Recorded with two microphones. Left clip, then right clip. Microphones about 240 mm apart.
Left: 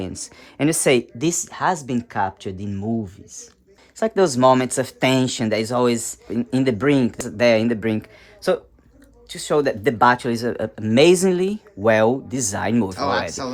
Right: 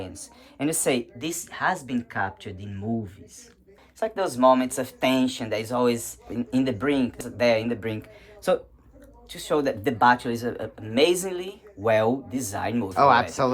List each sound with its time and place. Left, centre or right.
0.0 s a woman's voice: left
4.0 s speech: left
13.0 s speech: right